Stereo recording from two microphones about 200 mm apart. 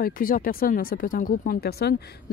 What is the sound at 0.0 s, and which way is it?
Speech, 45° left (ahead or behind).